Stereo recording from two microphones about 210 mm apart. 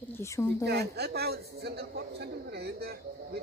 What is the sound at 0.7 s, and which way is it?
A man's voice, 50° right (ahead or behind).